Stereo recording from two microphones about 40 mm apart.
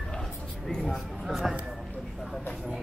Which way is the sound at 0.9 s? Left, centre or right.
Centre.